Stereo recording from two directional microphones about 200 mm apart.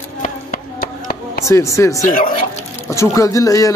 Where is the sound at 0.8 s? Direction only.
50° left (ahead or behind).